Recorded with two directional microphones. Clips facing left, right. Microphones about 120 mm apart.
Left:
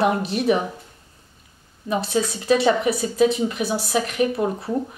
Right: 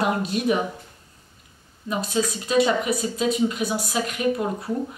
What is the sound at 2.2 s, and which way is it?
A woman's voice, 30° left (ahead or behind).